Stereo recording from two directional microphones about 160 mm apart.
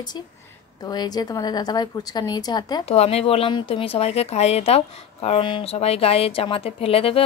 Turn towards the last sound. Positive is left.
turn(degrees=35)  # may be behind; listen again after turning